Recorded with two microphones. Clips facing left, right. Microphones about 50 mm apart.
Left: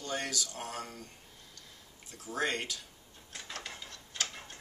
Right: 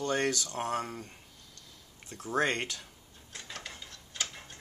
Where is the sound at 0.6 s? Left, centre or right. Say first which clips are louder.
Right 7 dB; right.